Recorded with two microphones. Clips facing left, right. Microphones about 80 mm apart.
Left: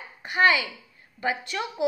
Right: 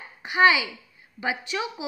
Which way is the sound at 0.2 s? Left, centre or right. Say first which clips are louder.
Right 2 dB; centre.